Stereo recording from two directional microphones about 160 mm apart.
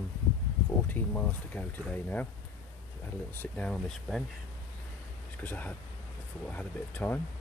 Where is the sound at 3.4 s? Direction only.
5° left (ahead or behind).